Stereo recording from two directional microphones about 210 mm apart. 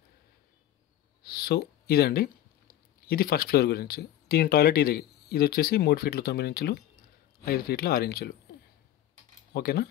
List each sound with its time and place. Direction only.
1.2 s speech: 45° left (ahead or behind)
9.5 s speech: 50° left (ahead or behind)